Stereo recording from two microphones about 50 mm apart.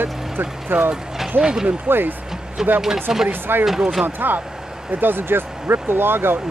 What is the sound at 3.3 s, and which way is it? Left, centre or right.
Speech, right.